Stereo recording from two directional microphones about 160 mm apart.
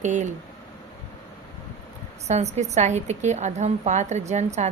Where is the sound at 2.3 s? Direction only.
45° right (ahead or behind).